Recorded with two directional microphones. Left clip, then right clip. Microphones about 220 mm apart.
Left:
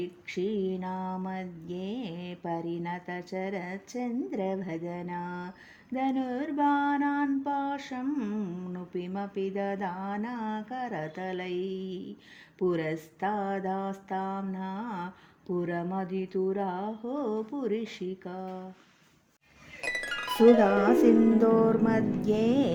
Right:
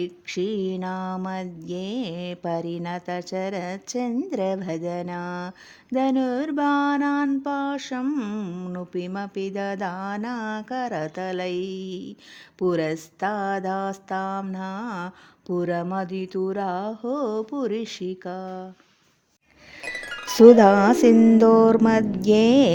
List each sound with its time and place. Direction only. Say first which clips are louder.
0.0 s mantra: right 5 dB; 50° right (ahead or behind)
19.8 s music: even; centre (ahead or behind)
20.6 s music: right 7 dB; 40° right (ahead or behind)